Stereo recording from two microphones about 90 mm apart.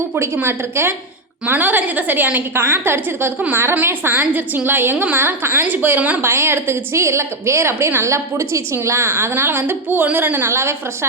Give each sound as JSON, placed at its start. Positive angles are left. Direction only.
{"t": 0.3, "sound": "a woman's voice", "side_deg": -25}